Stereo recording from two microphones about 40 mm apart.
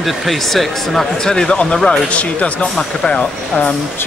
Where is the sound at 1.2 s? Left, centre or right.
Centre.